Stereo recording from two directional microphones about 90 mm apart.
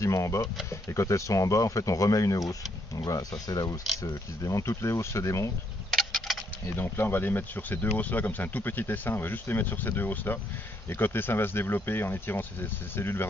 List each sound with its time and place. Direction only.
0.0 s speech: 35° left (ahead or behind)
5.9 s tick-tock: centre (ahead or behind)
6.8 s speech: 25° left (ahead or behind)